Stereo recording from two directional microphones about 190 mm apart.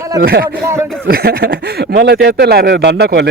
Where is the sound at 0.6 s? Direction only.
15° right (ahead or behind).